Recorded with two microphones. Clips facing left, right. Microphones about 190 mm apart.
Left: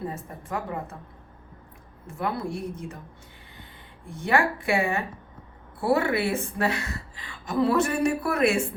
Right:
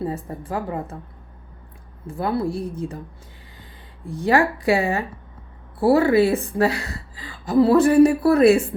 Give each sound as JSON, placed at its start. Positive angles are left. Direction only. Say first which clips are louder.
{"t": 0.1, "sound": "a woman's voice", "louder": "right 5 dB", "side_deg": -30}
{"t": 2.0, "sound": "a woman's voice", "louder": "right 6 dB", "side_deg": -30}
{"t": 4.1, "sound": "a woman's voice", "louder": "right 5 dB", "side_deg": -35}